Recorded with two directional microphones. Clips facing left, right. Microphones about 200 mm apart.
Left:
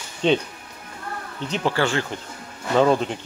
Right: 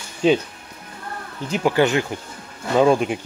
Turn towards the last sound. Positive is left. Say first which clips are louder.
# right 2 dB
turn(degrees=-10)  # may be behind; listen again after turning